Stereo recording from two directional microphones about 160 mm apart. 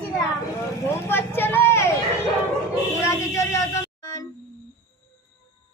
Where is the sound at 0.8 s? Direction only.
15° left (ahead or behind).